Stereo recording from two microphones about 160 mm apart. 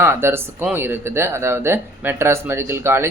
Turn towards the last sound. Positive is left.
turn(degrees=-15)  # may be behind; listen again after turning